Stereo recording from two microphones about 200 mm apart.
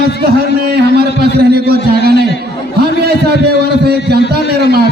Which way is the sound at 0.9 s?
55° right (ahead or behind).